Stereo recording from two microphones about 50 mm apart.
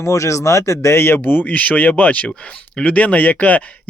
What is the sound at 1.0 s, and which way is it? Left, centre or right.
Speech, left.